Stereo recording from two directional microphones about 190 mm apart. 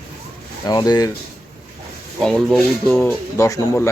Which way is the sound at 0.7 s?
20° left (ahead or behind).